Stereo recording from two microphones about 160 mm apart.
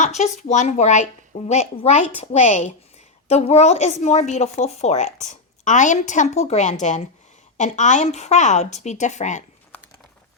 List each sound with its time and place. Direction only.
0.0 s a woman's voice: 45° left (ahead or behind)